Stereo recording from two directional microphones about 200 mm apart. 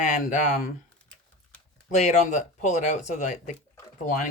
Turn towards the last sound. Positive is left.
turn(degrees=40)  # may be behind; listen again after turning